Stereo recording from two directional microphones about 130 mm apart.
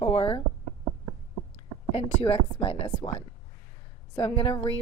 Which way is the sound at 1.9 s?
45° left (ahead or behind).